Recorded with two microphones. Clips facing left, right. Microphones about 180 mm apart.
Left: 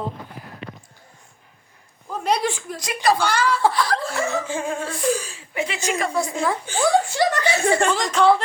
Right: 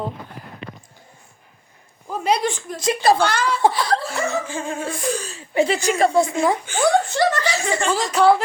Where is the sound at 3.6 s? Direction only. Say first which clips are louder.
Right 2 dB; 20° right (ahead or behind).